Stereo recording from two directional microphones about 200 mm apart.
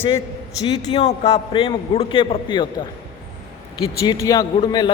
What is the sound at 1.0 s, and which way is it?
A man's voice, 30° left (ahead or behind).